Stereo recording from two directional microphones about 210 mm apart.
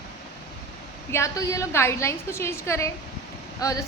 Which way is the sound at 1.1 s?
15° left (ahead or behind).